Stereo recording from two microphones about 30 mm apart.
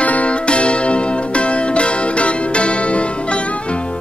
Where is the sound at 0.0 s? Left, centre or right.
Left.